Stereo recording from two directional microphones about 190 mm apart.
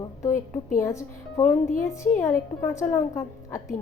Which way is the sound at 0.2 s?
15° left (ahead or behind).